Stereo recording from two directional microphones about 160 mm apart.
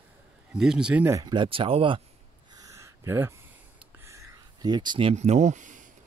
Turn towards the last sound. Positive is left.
turn(degrees=-50)  # may be behind; listen again after turning